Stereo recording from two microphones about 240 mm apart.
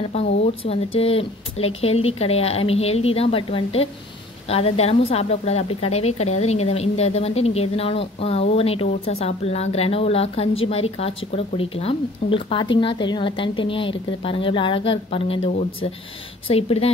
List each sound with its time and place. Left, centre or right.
0.1 s speech: left